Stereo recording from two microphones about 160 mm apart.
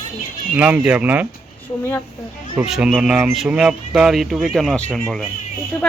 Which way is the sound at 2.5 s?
5° right (ahead or behind).